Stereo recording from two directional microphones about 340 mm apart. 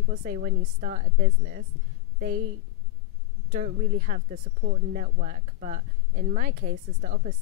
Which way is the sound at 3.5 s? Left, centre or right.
Right.